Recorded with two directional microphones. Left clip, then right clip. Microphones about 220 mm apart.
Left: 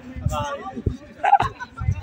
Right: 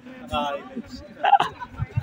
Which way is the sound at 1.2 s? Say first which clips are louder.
Left 1 dB; 5° right (ahead or behind).